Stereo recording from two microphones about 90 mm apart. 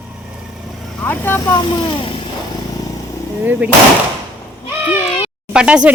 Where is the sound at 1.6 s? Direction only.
65° left (ahead or behind).